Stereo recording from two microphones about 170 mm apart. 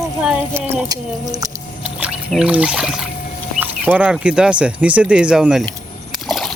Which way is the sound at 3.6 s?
10° right (ahead or behind).